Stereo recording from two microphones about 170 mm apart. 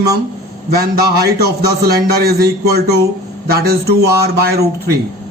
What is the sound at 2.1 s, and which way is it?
A man's voice, 65° right (ahead or behind).